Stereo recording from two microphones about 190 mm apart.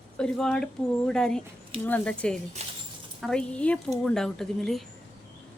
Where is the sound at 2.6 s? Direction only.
35° right (ahead or behind).